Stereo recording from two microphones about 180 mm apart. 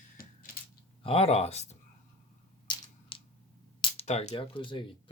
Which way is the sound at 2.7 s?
30° left (ahead or behind).